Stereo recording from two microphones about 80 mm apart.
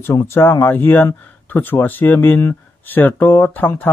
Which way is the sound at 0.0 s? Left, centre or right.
Left.